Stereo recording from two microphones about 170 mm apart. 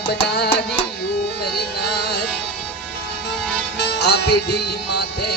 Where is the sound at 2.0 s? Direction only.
75° left (ahead or behind).